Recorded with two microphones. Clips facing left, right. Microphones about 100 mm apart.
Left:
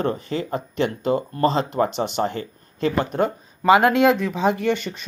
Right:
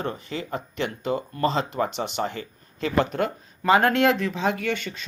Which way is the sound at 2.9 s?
20° left (ahead or behind).